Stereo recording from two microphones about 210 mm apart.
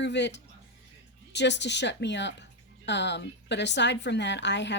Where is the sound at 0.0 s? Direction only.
55° left (ahead or behind).